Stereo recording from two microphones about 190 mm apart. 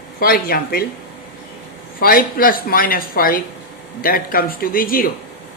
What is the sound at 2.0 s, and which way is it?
Speech, 50° left (ahead or behind).